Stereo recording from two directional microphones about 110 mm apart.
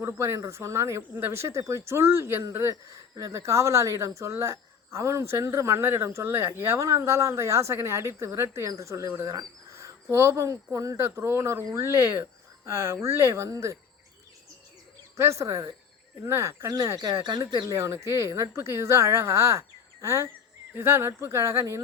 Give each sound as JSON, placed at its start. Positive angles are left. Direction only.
{"t": 0.0, "sound": "speech", "side_deg": -25}
{"t": 15.1, "sound": "speech", "side_deg": -25}